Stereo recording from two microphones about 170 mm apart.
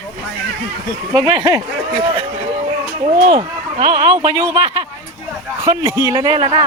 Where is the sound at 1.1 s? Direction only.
25° right (ahead or behind).